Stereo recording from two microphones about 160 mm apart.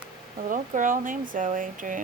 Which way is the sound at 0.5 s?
55° right (ahead or behind).